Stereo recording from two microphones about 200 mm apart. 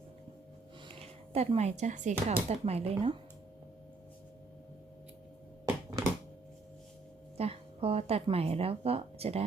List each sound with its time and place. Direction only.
0.9 s speech: 30° right (ahead or behind)
7.3 s speech: 30° right (ahead or behind)